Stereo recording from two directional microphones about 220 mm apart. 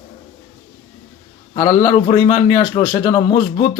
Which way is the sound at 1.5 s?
25° left (ahead or behind).